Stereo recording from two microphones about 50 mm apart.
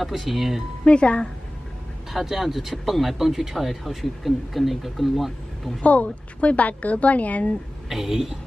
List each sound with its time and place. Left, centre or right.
0.0 s speech: centre
0.8 s a woman's voice: left
2.1 s speech: centre
5.8 s a woman's voice: left
7.9 s speech: centre